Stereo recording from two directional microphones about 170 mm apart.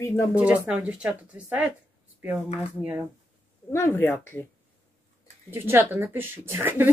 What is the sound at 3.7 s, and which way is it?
Speech, 15° left (ahead or behind).